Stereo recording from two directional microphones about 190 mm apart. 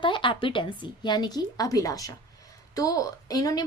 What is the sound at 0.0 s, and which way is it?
A woman's voice, 25° left (ahead or behind).